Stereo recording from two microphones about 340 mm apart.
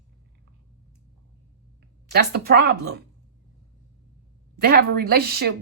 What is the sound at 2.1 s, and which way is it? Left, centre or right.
Speech, right.